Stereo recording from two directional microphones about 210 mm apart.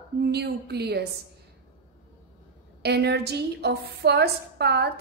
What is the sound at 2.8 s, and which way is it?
A woman's voice, 50° right (ahead or behind).